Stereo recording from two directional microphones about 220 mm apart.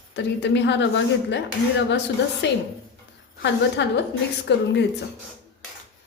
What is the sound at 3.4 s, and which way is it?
A woman's voice, 50° left (ahead or behind).